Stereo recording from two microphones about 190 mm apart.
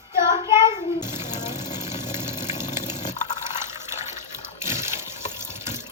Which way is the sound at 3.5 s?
40° left (ahead or behind).